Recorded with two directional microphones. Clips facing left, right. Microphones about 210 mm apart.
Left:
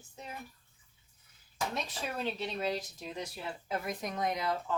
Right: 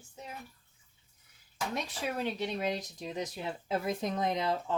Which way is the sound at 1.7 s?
10° right (ahead or behind).